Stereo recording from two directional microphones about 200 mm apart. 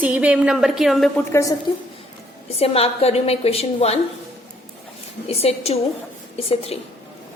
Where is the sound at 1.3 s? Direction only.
15° left (ahead or behind).